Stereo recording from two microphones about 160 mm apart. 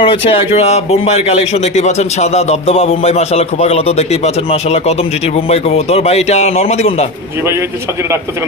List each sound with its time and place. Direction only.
0.0 s a man's voice: 35° left (ahead or behind)